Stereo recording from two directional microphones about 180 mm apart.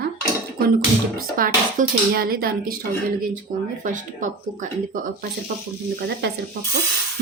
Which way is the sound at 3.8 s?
45° right (ahead or behind).